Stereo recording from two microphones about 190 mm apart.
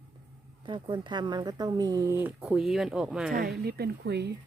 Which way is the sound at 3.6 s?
55° right (ahead or behind).